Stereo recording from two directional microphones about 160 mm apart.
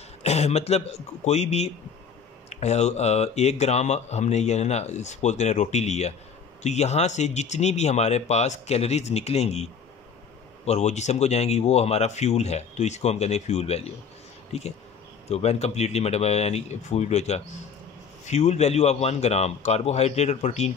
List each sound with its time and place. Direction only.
0.2 s speech: 40° left (ahead or behind)